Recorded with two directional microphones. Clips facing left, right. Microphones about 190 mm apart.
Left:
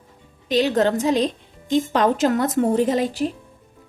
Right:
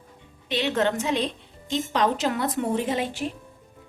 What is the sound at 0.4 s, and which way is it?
A woman's voice, 40° left (ahead or behind).